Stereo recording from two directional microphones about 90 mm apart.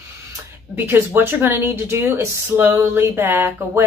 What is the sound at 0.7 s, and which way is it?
Speech, 25° right (ahead or behind).